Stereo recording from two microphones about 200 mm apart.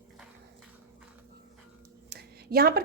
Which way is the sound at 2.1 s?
50° right (ahead or behind).